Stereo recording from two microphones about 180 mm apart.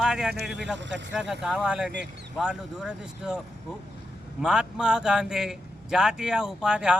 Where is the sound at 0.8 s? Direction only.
85° right.